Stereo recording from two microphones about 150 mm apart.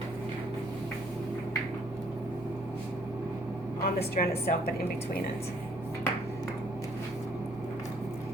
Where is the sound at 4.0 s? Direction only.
90° left.